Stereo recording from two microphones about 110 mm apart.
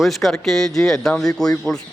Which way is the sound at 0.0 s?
Centre (ahead or behind).